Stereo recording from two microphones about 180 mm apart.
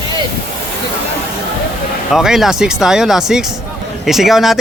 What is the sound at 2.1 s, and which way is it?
Speech, centre (ahead or behind).